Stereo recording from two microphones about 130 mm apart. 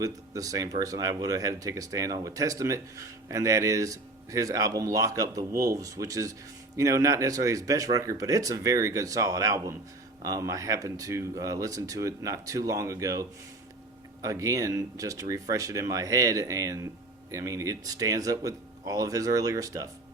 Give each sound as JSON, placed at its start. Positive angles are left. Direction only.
{"t": 0.0, "sound": "speech", "side_deg": -25}